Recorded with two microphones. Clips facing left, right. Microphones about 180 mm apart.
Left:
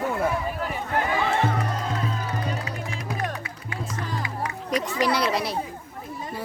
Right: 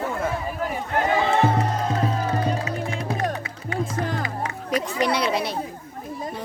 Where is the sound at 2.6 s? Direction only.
25° right (ahead or behind).